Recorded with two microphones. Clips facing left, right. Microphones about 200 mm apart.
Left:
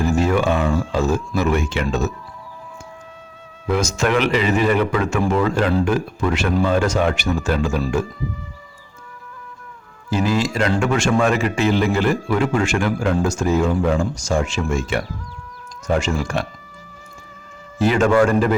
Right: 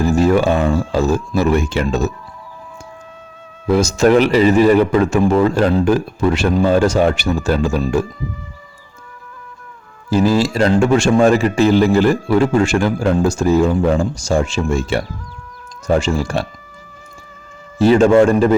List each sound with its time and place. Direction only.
0.0 s a man's voice: 35° right (ahead or behind)
3.7 s a man's voice: 35° right (ahead or behind)
10.1 s a man's voice: 35° right (ahead or behind)
17.7 s a man's voice: 30° right (ahead or behind)